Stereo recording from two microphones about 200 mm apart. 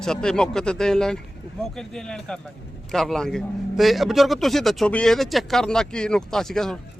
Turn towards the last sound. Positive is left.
turn(degrees=0)  # may be behind; listen again after turning